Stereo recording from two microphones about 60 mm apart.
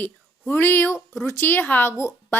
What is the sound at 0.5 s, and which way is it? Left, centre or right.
A woman's voice, left.